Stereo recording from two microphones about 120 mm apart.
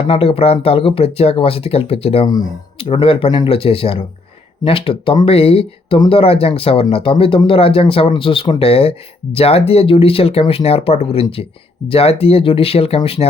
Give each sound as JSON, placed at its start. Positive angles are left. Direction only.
{"t": 0.0, "sound": "speech", "side_deg": 55}
{"t": 2.2, "sound": "speech", "side_deg": 35}
{"t": 2.7, "sound": "speech", "side_deg": 50}